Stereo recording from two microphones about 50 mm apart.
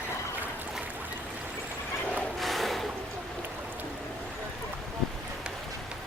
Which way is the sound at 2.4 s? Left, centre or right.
Centre.